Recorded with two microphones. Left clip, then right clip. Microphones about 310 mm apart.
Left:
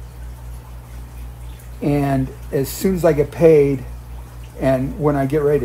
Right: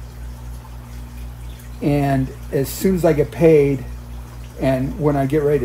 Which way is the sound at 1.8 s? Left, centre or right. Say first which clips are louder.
Even; centre.